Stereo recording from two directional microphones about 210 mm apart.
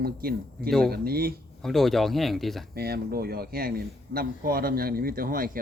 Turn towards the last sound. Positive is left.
turn(degrees=-45)  # may be behind; listen again after turning